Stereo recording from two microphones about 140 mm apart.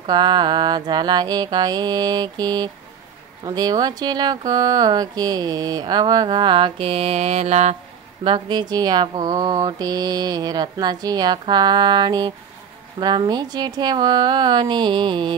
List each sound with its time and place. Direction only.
0.0 s speech: 30° right (ahead or behind); by 7.7 s 50° right (ahead or behind)
8.2 s speech: 35° right (ahead or behind)